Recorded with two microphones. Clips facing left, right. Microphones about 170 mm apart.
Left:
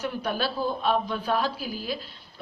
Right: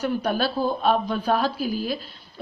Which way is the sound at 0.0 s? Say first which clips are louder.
Right 5 dB; 45° right (ahead or behind).